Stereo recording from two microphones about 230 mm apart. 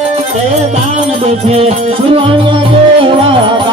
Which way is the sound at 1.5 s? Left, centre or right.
Right.